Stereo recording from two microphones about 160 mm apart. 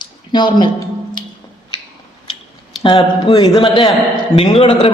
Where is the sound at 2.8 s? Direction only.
35° left (ahead or behind).